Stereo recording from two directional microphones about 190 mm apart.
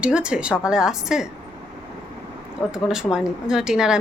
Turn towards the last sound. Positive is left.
turn(degrees=-5)  # may be behind; listen again after turning